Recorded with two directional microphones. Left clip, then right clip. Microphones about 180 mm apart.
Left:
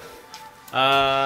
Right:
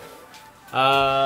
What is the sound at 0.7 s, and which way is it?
Speech, centre (ahead or behind).